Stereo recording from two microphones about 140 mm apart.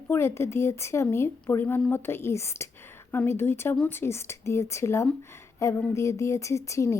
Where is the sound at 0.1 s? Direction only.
20° left (ahead or behind).